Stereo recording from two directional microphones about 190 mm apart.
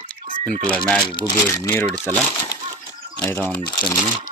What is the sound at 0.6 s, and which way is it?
Speech, 5° left (ahead or behind).